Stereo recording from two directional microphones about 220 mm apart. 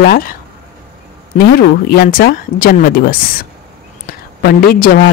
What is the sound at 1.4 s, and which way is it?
A man's voice, 45° left (ahead or behind).